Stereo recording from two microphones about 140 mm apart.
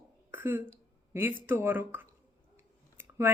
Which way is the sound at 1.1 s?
15° right (ahead or behind).